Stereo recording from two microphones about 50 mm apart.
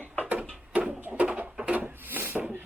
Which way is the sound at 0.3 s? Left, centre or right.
Right.